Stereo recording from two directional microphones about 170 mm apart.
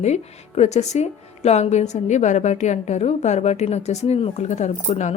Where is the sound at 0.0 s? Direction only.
40° left (ahead or behind).